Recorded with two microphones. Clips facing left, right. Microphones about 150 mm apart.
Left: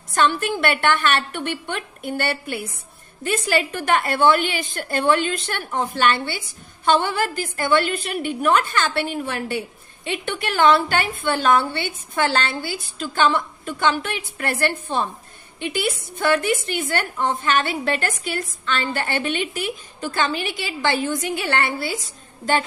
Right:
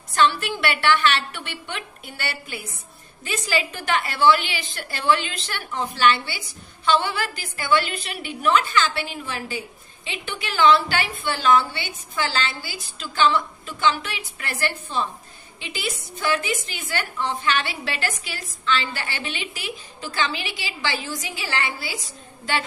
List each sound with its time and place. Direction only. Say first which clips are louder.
0.1 s a woman's voice: left 1 dB; 50° left (ahead or behind)